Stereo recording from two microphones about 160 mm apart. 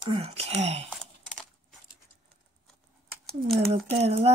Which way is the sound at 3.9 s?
40° right (ahead or behind).